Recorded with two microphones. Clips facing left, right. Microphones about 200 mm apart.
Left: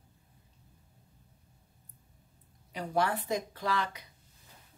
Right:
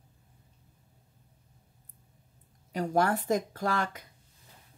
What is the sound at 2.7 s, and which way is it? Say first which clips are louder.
Speech: right 4 dB; 45° right (ahead or behind).